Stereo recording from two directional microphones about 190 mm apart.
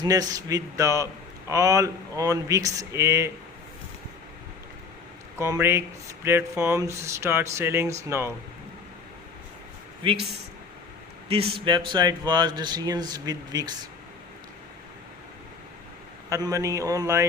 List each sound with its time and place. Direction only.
0.0 s speech: 20° right (ahead or behind)
5.4 s speech: 15° right (ahead or behind)
10.0 s speech: 25° right (ahead or behind)
11.3 s speech: 30° right (ahead or behind)
16.3 s speech: 15° right (ahead or behind)